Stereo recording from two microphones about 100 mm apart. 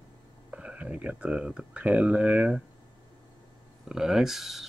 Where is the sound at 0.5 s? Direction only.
15° right (ahead or behind).